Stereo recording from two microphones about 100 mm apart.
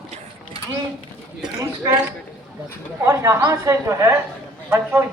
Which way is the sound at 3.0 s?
30° right (ahead or behind).